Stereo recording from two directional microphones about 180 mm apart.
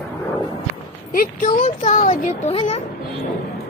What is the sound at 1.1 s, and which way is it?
Speech, 50° left (ahead or behind).